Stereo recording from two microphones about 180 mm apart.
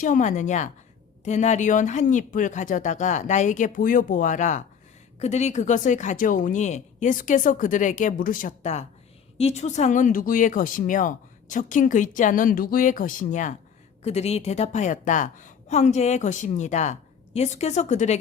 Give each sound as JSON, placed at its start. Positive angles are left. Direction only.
{"t": 0.0, "sound": "a woman's voice", "side_deg": 45}